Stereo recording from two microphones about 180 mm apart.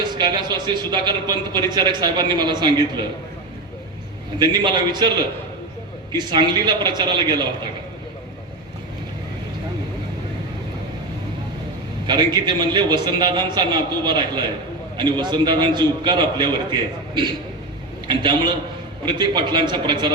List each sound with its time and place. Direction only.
0.0 s a man's voice: 25° right (ahead or behind)
4.4 s a man's voice: 25° right (ahead or behind)
12.0 s a man's voice: 25° right (ahead or behind)
18.1 s a man's voice: 25° right (ahead or behind)